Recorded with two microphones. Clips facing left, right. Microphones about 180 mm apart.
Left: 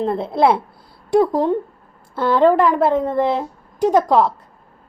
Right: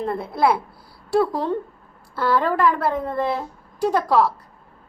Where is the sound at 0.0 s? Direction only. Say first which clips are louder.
Left 4 dB; 25° left (ahead or behind).